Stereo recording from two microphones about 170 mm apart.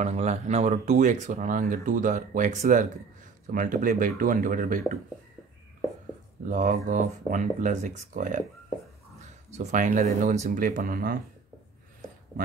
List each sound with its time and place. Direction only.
0.0 s speech: 40° right (ahead or behind)
6.5 s speech: 45° right (ahead or behind)
9.5 s speech: 45° right (ahead or behind)